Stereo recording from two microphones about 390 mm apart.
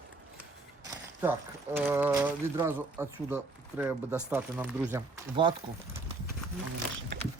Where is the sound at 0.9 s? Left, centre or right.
Centre.